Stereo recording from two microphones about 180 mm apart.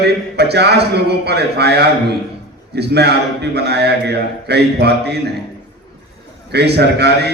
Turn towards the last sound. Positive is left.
turn(degrees=-65)  # may be behind; listen again after turning